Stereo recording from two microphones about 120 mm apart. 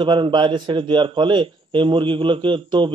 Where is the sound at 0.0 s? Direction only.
45° right (ahead or behind).